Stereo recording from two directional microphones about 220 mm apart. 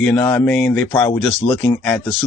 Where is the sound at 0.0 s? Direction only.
10° left (ahead or behind).